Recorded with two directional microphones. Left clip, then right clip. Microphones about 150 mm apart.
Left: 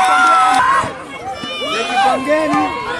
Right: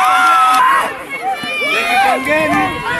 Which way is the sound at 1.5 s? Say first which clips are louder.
Right 3 dB; 55° right (ahead or behind).